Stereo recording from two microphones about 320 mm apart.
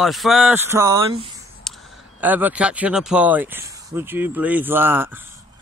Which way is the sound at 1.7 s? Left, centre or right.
Centre.